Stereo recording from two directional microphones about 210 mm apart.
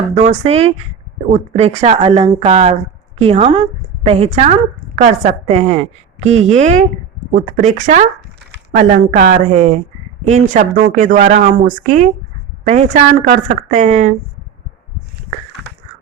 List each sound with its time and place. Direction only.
0.2 s a woman's voice: 30° right (ahead or behind)